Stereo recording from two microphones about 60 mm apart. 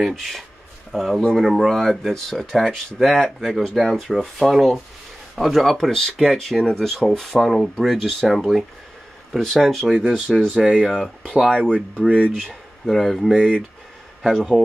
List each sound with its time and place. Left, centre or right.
0.0 s speech: centre
10.5 s speech: centre
10.9 s speech: centre
11.3 s speech: centre
12.4 s speech: centre
13.3 s speech: centre
14.3 s speech: centre